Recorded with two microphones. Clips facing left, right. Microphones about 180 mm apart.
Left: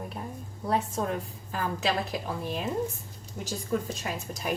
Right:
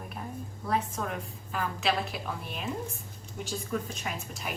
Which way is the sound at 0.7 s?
30° left (ahead or behind).